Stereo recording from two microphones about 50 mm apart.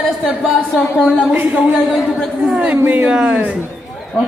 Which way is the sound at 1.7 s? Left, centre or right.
Centre.